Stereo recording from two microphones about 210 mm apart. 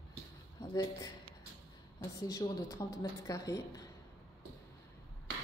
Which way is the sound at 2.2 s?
15° left (ahead or behind).